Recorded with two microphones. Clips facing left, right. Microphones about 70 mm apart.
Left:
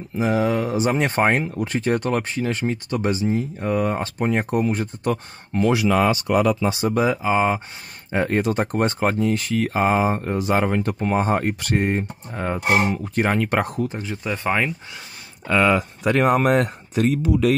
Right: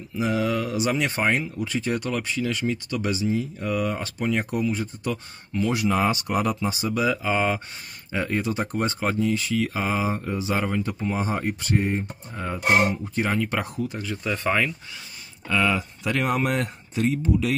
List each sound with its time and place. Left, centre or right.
0.2 s speech: left
4.6 s speech: left
5.7 s speech: left
6.6 s speech: left
6.9 s speech: left
7.2 s speech: centre
8.1 s speech: left
13.8 s speech: left
15.4 s speech: left